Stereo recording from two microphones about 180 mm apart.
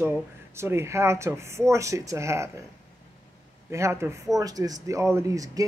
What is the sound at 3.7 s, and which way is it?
Speech, 15° right (ahead or behind).